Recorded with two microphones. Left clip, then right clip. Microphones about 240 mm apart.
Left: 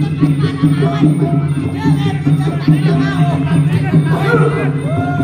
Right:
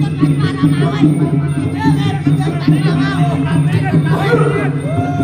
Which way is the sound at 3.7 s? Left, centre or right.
Right.